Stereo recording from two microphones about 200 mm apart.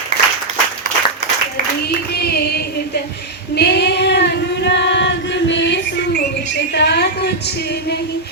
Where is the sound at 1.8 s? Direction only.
55° left (ahead or behind).